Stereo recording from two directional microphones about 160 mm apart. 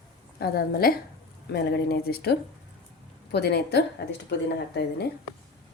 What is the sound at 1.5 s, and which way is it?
Speech, 90° left.